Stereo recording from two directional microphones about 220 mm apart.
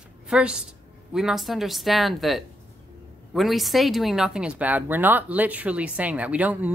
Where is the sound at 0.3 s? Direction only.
5° right (ahead or behind).